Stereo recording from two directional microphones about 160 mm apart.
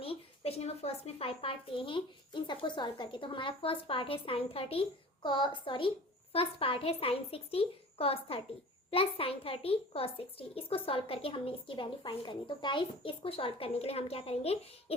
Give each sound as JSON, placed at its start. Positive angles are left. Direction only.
{"t": 0.0, "sound": "a child's voice", "side_deg": 35}